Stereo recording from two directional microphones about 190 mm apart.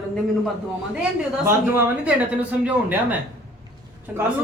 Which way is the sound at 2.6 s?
10° right (ahead or behind).